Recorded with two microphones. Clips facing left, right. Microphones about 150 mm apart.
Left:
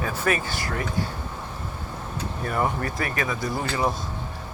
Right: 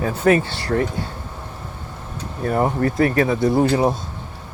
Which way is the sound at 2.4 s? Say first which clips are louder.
Right 7 dB; 35° right (ahead or behind).